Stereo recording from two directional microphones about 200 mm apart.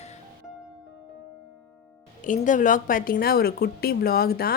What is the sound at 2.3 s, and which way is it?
A woman's voice, 40° left (ahead or behind).